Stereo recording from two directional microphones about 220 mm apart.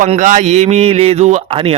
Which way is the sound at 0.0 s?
35° right (ahead or behind).